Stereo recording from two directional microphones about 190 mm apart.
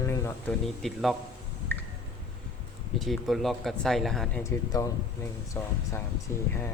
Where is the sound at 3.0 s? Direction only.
Centre (ahead or behind).